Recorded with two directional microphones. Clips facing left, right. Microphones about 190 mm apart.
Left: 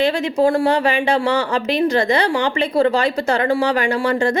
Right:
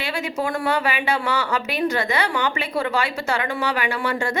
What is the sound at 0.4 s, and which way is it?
Speech, 30° left (ahead or behind).